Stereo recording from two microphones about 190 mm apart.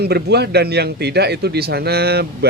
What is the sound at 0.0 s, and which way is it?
A man's voice, 60° right (ahead or behind).